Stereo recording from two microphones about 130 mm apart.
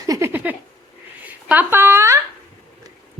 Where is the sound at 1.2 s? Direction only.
15° right (ahead or behind).